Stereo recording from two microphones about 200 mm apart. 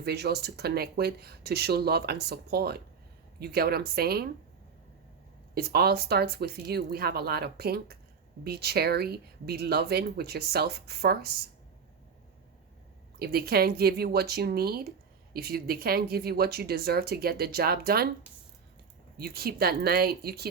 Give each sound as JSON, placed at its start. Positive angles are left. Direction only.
{"t": 0.0, "sound": "speech", "side_deg": -55}
{"t": 5.5, "sound": "speech", "side_deg": -50}
{"t": 13.1, "sound": "speech", "side_deg": -50}
{"t": 19.1, "sound": "speech", "side_deg": -50}